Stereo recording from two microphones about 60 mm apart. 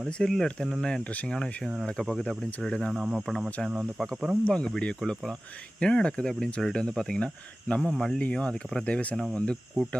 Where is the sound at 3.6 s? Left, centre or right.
Centre.